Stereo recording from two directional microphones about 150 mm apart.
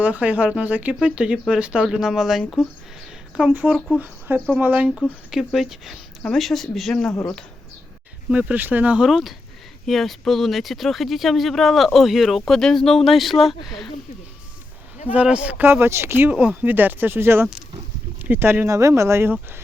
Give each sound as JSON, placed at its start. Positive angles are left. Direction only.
{"t": 0.0, "sound": "speech", "side_deg": -10}
{"t": 7.1, "sound": "speech", "side_deg": 20}
{"t": 8.3, "sound": "speech", "side_deg": -10}
{"t": 15.1, "sound": "speech", "side_deg": -10}